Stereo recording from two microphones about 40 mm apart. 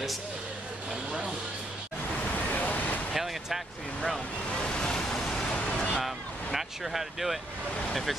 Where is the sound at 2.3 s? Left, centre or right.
Left.